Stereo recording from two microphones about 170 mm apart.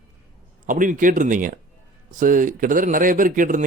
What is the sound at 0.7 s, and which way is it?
Speech, 50° right (ahead or behind).